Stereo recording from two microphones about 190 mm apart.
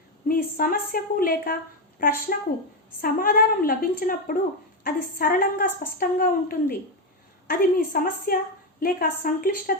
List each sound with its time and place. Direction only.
0.3 s a woman's voice: 50° left (ahead or behind)